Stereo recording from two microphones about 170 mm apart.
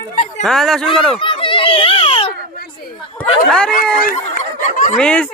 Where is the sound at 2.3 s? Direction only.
60° left (ahead or behind).